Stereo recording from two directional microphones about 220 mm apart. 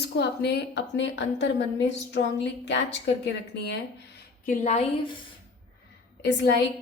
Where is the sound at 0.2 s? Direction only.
50° left (ahead or behind).